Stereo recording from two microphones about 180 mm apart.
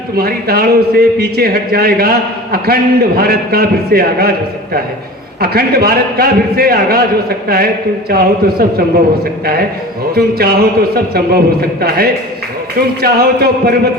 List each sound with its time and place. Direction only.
0.2 s a man's voice: 60° right (ahead or behind)
5.4 s a man's voice: 55° right (ahead or behind)
10.2 s a man's voice: 60° right (ahead or behind)